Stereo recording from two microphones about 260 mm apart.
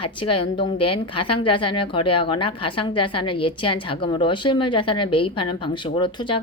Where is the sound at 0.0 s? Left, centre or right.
Centre.